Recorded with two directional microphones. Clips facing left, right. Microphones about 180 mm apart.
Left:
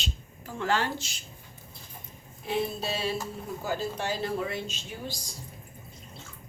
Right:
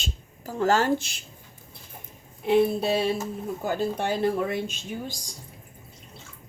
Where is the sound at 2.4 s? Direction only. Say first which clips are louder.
Right 9 dB; 60° right (ahead or behind).